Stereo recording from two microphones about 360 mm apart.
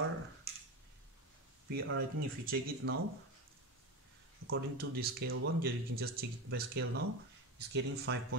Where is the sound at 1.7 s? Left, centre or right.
Right.